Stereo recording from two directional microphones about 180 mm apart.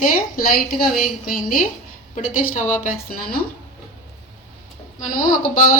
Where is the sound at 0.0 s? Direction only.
50° left (ahead or behind).